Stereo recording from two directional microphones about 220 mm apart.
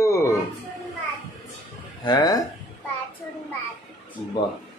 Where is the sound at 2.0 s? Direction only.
20° left (ahead or behind).